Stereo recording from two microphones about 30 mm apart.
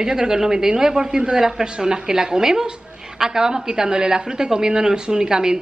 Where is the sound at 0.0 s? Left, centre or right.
Right.